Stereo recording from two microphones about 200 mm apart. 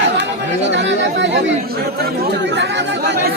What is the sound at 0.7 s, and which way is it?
Speech, 60° right (ahead or behind).